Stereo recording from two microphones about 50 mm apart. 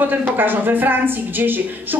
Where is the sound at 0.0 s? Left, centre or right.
Right.